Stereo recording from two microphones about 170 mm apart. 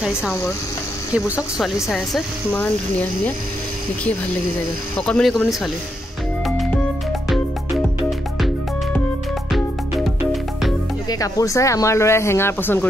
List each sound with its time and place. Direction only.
0.3 s speech: 20° left (ahead or behind)
1.1 s speech: 10° right (ahead or behind)
1.9 s speech: 5° left (ahead or behind)
4.9 s speech: 5° left (ahead or behind)
9.5 s music: centre (ahead or behind)
11.1 s speech: 20° left (ahead or behind)